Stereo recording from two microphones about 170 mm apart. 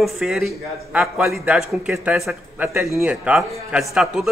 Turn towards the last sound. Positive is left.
turn(degrees=0)  # may be behind; listen again after turning